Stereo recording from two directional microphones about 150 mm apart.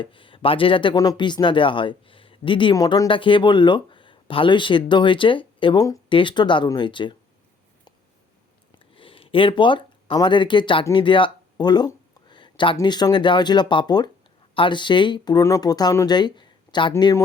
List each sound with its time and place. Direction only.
0.0 s speech: 35° left (ahead or behind)
9.0 s speech: 35° left (ahead or behind)
10.9 s a sound: 35° left (ahead or behind)
12.7 s speech: 30° left (ahead or behind)